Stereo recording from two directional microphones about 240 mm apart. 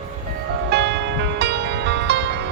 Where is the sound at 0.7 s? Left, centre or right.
Right.